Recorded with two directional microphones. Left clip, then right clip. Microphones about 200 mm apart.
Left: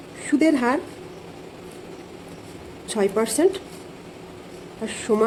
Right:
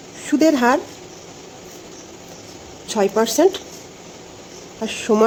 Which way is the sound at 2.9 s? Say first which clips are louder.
Right 4 dB; 15° right (ahead or behind).